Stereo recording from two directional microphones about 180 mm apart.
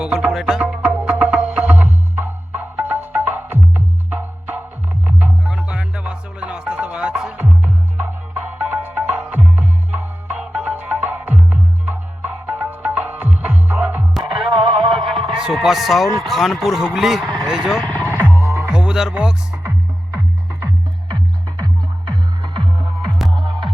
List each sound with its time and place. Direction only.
0.0 s music: 5° right (ahead or behind)
14.5 s music: 30° right (ahead or behind)
15.1 s a sound: centre (ahead or behind)
16.2 s a man's voice: centre (ahead or behind)
17.8 s music: 10° left (ahead or behind)
18.7 s speech: 5° right (ahead or behind)
22.1 s music: 25° right (ahead or behind)
23.0 s music: centre (ahead or behind)